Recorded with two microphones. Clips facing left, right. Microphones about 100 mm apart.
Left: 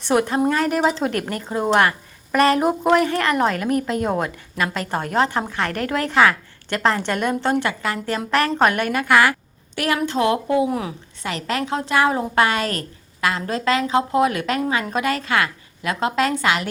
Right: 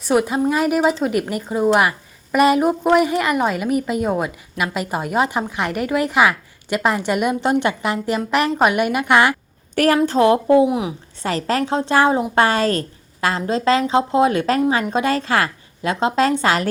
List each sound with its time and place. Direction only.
0.0 s a woman's voice: 5° right (ahead or behind); by 9.3 s 20° right (ahead or behind)
9.7 s a woman's voice: 45° right (ahead or behind)
10.1 s a woman's voice: 30° right (ahead or behind)
10.7 s a woman's voice: 15° right (ahead or behind)
11.2 s a woman's voice: 35° right (ahead or behind)